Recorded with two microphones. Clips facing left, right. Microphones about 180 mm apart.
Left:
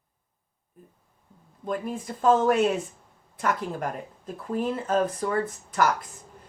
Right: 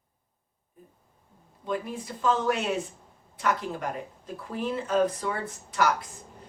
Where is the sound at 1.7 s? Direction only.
50° left (ahead or behind).